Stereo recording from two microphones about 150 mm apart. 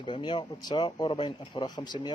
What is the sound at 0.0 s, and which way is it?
Speech, 30° left (ahead or behind).